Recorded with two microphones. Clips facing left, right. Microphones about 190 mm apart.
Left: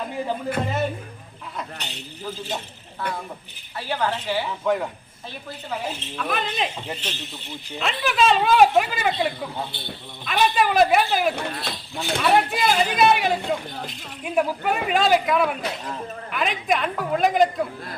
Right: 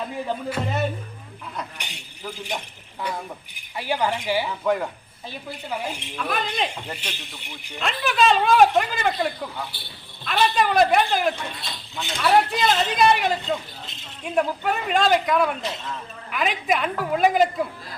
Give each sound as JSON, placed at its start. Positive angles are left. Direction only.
{"t": 0.6, "sound": "speech", "side_deg": 10}
{"t": 1.8, "sound": "speech", "side_deg": -15}
{"t": 4.4, "sound": "a woman's voice", "side_deg": 0}
{"t": 5.5, "sound": "speech", "side_deg": -15}
{"t": 6.2, "sound": "a woman's voice", "side_deg": 0}
{"t": 7.0, "sound": "speech", "side_deg": -15}
{"t": 7.8, "sound": "a woman's voice", "side_deg": 0}
{"t": 9.7, "sound": "speech", "side_deg": 20}
{"t": 10.2, "sound": "a woman's voice", "side_deg": 10}
{"t": 11.3, "sound": "speech", "side_deg": 65}
{"t": 12.2, "sound": "a woman's voice", "side_deg": 0}